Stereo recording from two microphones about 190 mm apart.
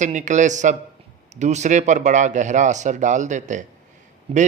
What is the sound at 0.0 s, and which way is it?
A man's voice, 40° right (ahead or behind).